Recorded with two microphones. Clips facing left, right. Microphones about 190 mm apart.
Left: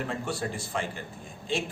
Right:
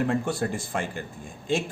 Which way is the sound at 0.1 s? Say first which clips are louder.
Right 6 dB; 50° right (ahead or behind).